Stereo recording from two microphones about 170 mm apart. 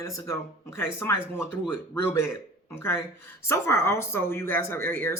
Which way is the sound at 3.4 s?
15° left (ahead or behind).